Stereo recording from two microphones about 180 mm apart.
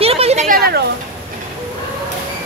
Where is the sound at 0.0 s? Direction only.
35° right (ahead or behind).